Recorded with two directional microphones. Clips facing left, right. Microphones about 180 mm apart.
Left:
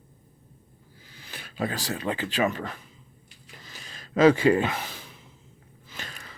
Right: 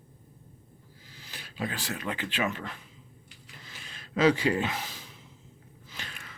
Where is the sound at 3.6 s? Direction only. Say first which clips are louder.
Left 3 dB; 40° left (ahead or behind); by 5.1 s 60° left (ahead or behind).